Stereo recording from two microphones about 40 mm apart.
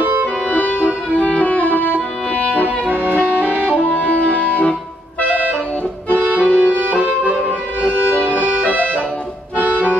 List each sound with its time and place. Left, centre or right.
0.5 s music: left
2.5 s music: right
3.2 s music: left
6.1 s accordion: right
6.4 s music: left
6.7 s music: right
7.0 s music: left
8.1 s accordion: left
9.6 s accordion: right